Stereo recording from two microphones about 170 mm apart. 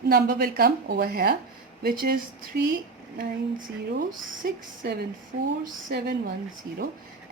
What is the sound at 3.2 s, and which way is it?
Speech, 55° right (ahead or behind).